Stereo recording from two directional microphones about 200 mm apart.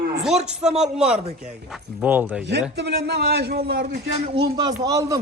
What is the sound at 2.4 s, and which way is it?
A man's voice, 55° right (ahead or behind).